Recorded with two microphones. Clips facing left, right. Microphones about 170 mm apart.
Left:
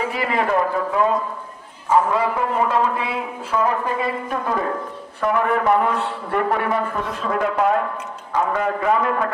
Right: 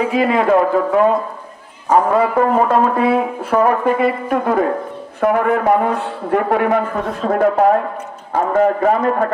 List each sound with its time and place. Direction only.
0.3 s speech: 50° right (ahead or behind)